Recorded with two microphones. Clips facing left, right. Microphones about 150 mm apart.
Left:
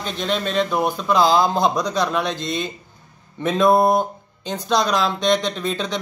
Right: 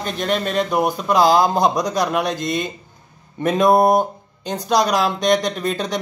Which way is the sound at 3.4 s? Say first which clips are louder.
Right 1 dB; 10° right (ahead or behind).